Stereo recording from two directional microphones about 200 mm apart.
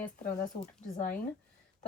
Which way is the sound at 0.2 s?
40° left (ahead or behind).